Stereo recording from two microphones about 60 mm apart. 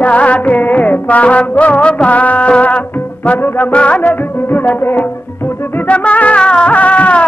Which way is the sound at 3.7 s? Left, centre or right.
Centre.